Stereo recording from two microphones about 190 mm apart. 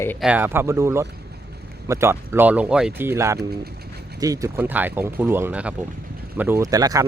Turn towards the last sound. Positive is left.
turn(degrees=-20)  # may be behind; listen again after turning